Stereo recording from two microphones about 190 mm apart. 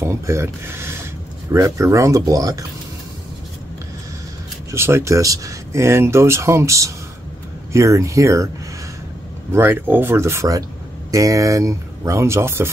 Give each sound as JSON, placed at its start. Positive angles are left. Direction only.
{"t": 0.0, "sound": "speech", "side_deg": -15}
{"t": 4.6, "sound": "speech", "side_deg": -15}
{"t": 9.5, "sound": "speech", "side_deg": -10}